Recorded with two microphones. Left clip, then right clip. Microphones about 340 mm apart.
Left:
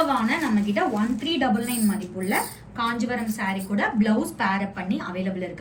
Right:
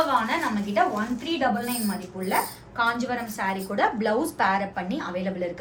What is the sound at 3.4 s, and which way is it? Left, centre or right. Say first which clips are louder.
Speech: right 4 dB; right.